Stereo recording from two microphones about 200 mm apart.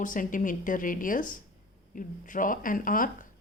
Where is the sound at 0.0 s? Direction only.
40° left (ahead or behind).